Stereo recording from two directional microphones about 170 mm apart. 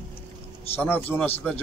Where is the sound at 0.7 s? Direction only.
10° left (ahead or behind).